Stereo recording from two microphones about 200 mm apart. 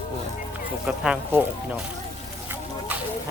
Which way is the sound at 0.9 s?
5° right (ahead or behind).